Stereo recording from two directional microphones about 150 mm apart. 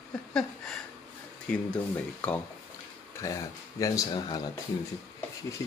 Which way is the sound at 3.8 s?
25° left (ahead or behind).